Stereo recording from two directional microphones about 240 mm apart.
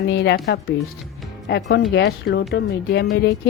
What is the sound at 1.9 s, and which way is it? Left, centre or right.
A woman's voice, left.